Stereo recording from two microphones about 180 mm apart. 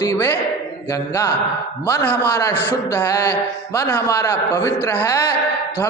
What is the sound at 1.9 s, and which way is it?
A man's voice, 10° left (ahead or behind).